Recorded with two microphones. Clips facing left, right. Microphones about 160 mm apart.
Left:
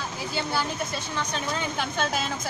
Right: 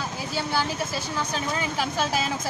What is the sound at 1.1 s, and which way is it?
Speech, 5° right (ahead or behind).